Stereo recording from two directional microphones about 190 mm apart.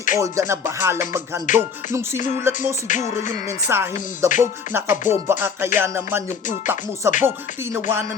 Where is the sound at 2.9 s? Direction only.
40° left (ahead or behind).